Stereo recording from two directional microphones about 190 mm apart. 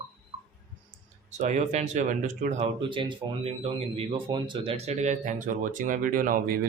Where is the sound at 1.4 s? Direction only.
35° right (ahead or behind).